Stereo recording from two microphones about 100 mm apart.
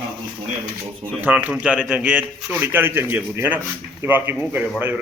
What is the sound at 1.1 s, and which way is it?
A man's voice, 15° right (ahead or behind).